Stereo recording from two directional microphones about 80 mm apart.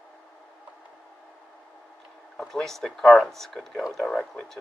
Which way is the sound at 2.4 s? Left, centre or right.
Centre.